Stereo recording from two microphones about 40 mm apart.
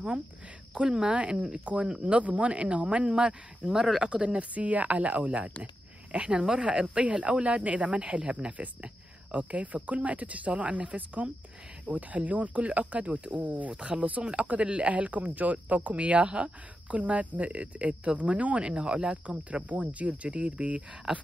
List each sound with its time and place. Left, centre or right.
0.7 s speech: right
4.1 s speech: right
4.6 s speech: right
8.5 s speech: right
18.7 s speech: right
19.2 s speech: right